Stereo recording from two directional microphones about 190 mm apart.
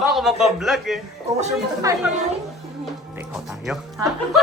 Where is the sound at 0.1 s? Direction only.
Centre (ahead or behind).